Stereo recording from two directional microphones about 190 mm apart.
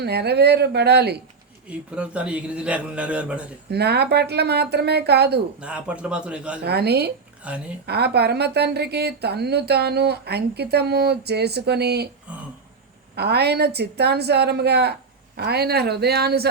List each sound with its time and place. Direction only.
0.0 s a woman's voice: 60° right (ahead or behind)
2.0 s a man's voice: 5° right (ahead or behind)
3.7 s a woman's voice: 60° right (ahead or behind)
5.5 s a man's voice: 5° right (ahead or behind)
6.7 s a woman's voice: 60° right (ahead or behind)
7.4 s a man's voice: 5° right (ahead or behind)
7.9 s a woman's voice: 60° right (ahead or behind)
13.1 s a woman's voice: 60° right (ahead or behind)